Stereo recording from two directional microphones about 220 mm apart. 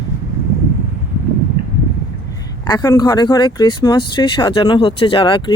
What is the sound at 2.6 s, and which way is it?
Speech, 20° left (ahead or behind).